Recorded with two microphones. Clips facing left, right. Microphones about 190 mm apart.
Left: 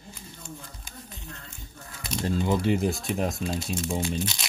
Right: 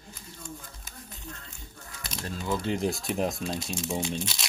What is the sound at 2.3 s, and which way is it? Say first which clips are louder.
Speech: left 6 dB; 25° left (ahead or behind).